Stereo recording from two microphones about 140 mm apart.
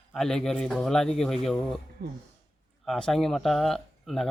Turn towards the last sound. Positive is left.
turn(degrees=0)  # may be behind; listen again after turning